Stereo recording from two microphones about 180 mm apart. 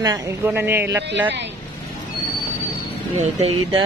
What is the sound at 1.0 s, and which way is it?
Speech, 75° right (ahead or behind).